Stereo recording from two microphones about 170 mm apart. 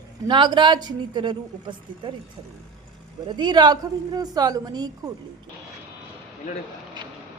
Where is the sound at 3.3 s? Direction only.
25° right (ahead or behind).